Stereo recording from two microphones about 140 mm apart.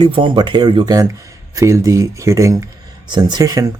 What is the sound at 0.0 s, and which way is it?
Speech, 35° right (ahead or behind).